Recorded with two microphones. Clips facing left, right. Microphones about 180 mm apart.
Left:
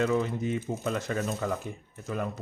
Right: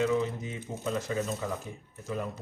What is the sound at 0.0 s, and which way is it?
Speech, 55° left (ahead or behind).